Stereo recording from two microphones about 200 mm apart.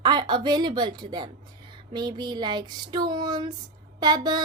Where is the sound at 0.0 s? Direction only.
20° right (ahead or behind).